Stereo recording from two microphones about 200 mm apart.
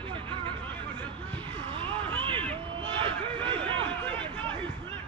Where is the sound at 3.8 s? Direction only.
5° left (ahead or behind).